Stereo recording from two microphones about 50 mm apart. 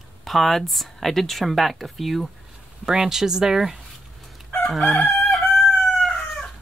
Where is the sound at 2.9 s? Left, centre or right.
Centre.